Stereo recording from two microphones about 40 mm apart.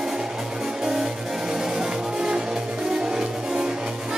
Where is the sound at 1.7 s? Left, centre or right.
Centre.